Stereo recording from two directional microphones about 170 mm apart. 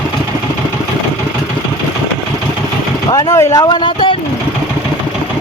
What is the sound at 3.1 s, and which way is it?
Speech, 20° left (ahead or behind).